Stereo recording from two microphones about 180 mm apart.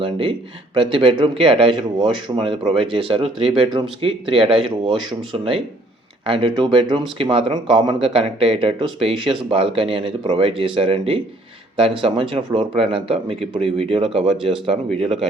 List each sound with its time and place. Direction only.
0.0 s speech: 30° right (ahead or behind)